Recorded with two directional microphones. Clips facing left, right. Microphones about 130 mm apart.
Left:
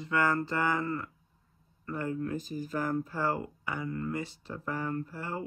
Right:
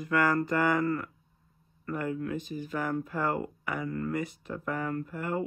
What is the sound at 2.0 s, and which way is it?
Speech, 35° left (ahead or behind).